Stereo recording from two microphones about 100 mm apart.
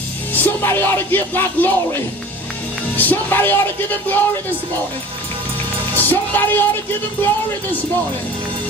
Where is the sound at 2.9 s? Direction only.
20° left (ahead or behind).